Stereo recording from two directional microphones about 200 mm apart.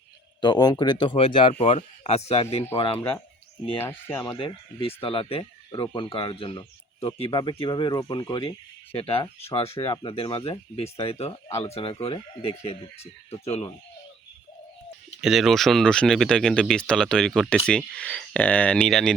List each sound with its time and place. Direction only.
0.4 s speech: 20° left (ahead or behind)
3.0 s speech: 10° left (ahead or behind); by 13.7 s 30° left (ahead or behind)
15.2 s speech: centre (ahead or behind)